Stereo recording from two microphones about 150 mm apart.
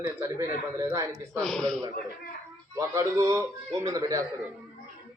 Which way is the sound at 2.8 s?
25° right (ahead or behind).